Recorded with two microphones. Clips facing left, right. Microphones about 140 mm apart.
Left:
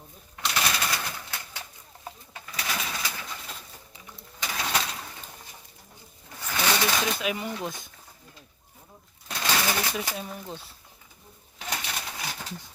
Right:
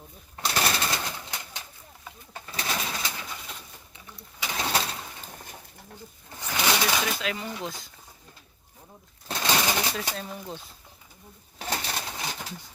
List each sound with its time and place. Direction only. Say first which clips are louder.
0.4 s bird: right 2 dB; 35° right (ahead or behind)
2.3 s pigeon: right 2 dB; 30° right (ahead or behind)
4.4 s bird: right 1 dB; 30° right (ahead or behind)
6.4 s a sound: even; 15° right (ahead or behind)
7.2 s speech: left 2 dB; 15° left (ahead or behind)
9.2 s pigeon: right 2 dB; 25° right (ahead or behind)
10.2 s speech: even; centre (ahead or behind)
11.6 s pigeon: right 3 dB; 35° right (ahead or behind)